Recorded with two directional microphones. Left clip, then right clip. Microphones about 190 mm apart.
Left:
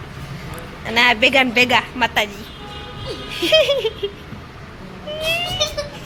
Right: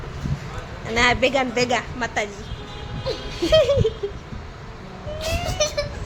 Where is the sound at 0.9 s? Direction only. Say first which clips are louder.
Left 4 dB; centre (ahead or behind).